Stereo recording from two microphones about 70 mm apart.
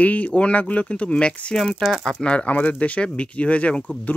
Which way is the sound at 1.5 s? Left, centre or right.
Centre.